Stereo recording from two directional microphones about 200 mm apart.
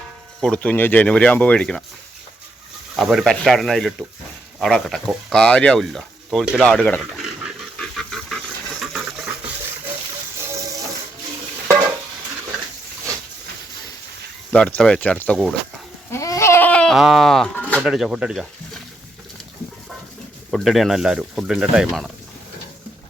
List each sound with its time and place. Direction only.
0.4 s speech: 5° left (ahead or behind)
2.9 s speech: centre (ahead or behind)
7.8 s a sound: 5° left (ahead or behind)
14.5 s speech: 5° left (ahead or behind)
16.1 s goat: 15° left (ahead or behind); by 18.8 s 5° right (ahead or behind)
20.5 s speech: centre (ahead or behind)